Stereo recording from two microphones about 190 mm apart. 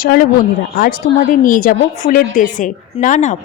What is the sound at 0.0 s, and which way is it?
A woman's voice, 50° left (ahead or behind).